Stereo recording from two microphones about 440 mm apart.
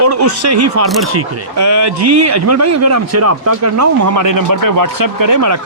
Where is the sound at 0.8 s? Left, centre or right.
Centre.